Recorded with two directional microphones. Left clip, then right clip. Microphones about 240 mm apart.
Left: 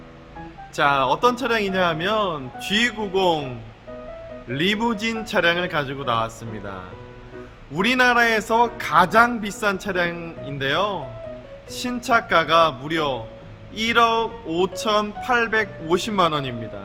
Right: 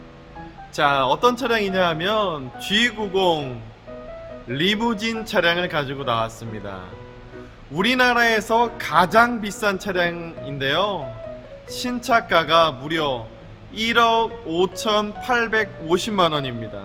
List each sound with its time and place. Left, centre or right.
0.8 s a man's voice: centre